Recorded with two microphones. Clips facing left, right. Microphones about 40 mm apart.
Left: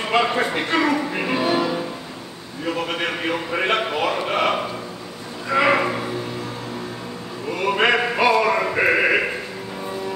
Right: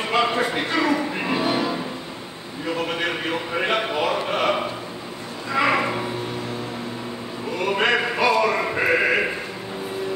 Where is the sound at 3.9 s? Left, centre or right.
Centre.